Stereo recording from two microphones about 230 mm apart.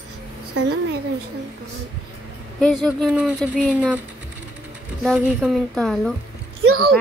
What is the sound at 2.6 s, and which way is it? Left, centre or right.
Speech, centre.